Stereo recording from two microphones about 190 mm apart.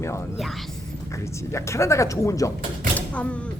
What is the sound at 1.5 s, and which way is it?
Speech, 15° left (ahead or behind).